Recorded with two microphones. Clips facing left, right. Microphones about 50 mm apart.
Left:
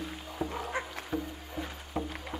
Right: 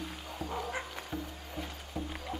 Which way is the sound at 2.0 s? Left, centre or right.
Left.